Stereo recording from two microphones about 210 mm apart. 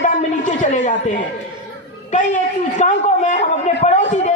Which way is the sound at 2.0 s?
35° left (ahead or behind).